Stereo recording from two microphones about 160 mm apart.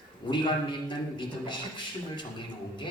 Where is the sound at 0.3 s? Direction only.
30° left (ahead or behind).